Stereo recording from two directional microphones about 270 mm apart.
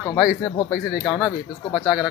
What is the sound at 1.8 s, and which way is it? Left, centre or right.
Speech, centre.